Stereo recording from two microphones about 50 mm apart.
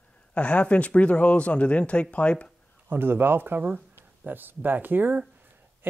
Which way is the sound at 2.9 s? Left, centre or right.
Right.